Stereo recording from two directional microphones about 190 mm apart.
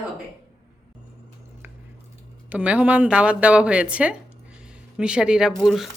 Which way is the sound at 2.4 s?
5° right (ahead or behind).